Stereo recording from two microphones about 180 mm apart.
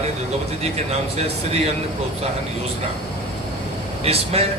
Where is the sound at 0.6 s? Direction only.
35° right (ahead or behind).